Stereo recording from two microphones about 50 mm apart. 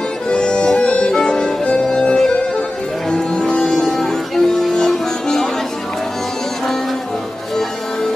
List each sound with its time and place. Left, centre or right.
0.3 s music: centre